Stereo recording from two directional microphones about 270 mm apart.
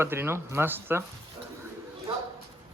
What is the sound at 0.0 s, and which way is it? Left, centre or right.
Speech, centre.